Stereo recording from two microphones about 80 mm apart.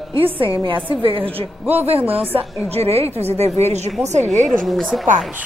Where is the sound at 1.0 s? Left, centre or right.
Right.